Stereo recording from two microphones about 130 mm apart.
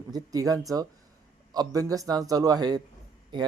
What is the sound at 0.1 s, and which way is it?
Speech, 30° right (ahead or behind).